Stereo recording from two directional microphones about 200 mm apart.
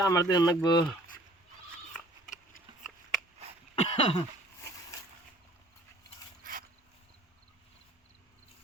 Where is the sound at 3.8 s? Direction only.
30° left (ahead or behind).